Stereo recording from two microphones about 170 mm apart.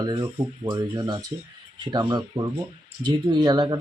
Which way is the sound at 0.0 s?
20° right (ahead or behind).